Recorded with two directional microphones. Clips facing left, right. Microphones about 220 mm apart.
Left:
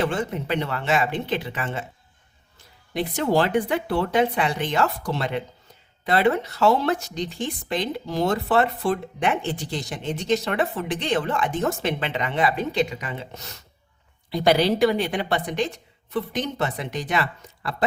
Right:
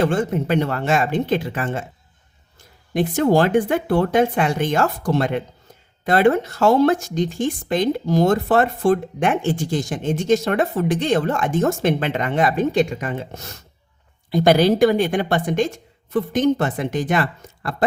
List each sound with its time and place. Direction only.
0.0 s speech: 45° right (ahead or behind)
2.9 s speech: 50° right (ahead or behind)